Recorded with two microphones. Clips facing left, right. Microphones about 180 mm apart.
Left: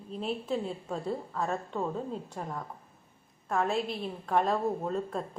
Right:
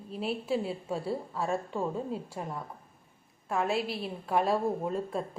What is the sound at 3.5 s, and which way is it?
A woman's voice, 5° right (ahead or behind).